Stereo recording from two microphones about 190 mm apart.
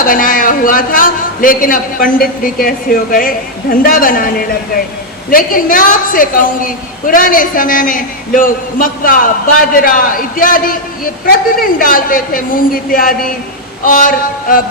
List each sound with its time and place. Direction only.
0.0 s a woman's voice: 45° left (ahead or behind)